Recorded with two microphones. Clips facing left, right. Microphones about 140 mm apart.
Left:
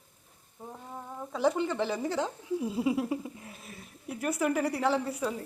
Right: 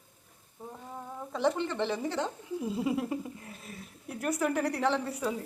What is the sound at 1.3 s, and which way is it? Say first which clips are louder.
Speech: left 1 dB; 5° left (ahead or behind).